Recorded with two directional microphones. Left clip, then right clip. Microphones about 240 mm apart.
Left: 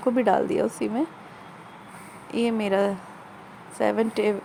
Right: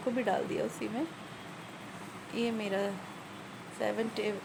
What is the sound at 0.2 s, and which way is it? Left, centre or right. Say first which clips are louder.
Speech: left 10 dB; left.